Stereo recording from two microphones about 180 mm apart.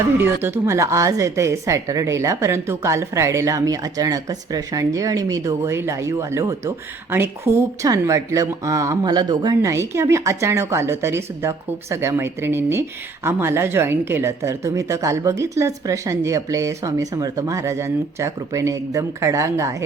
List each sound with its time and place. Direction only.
0.2 s a woman's voice: 10° right (ahead or behind)